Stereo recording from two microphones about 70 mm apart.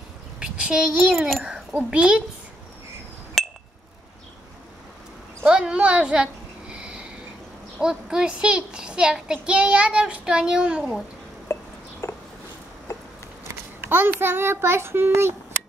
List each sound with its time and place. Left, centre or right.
0.4 s a child's voice: centre
3.4 s chink: centre
5.5 s a sound: centre
7.8 s a child's voice: centre
11.5 s a sound: left
13.5 s a child's voice: right